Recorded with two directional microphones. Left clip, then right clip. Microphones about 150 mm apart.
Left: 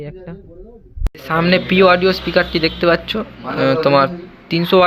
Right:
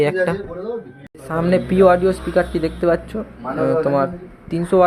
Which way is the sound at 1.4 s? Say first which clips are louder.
Left 1 dB; 15° right (ahead or behind).